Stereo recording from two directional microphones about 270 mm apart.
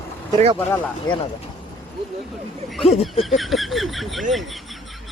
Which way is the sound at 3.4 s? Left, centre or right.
Centre.